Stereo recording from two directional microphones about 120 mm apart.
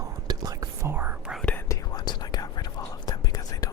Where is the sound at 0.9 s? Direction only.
15° right (ahead or behind).